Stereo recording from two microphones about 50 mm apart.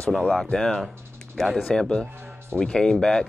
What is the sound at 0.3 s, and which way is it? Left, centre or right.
Speech, centre.